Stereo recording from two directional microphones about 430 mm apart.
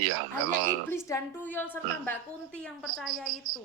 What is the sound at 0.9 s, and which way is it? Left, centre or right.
A woman's voice, centre.